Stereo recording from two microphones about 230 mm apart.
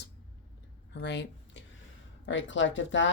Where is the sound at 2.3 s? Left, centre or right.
Left.